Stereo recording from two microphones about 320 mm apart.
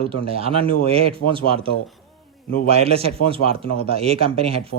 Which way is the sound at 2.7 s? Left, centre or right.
Centre.